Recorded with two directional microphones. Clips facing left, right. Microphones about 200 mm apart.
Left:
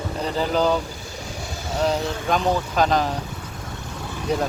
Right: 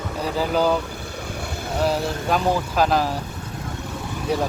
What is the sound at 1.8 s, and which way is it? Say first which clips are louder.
Speech: even; 5° right (ahead or behind).